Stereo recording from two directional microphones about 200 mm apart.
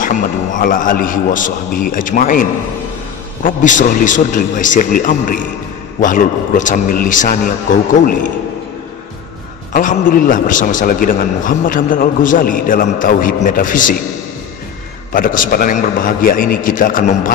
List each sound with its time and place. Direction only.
0.0 s a man's voice: 40° left (ahead or behind)
3.4 s a man's voice: 40° left (ahead or behind)
9.7 s a man's voice: 40° left (ahead or behind)
15.1 s a man's voice: 40° left (ahead or behind)